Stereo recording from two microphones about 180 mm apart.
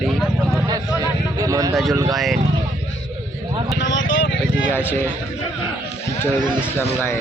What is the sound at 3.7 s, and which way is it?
Speech, 90° left.